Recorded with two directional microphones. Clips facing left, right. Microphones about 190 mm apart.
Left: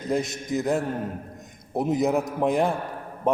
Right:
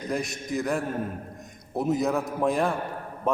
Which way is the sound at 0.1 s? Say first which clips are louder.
Left 4 dB; 20° left (ahead or behind).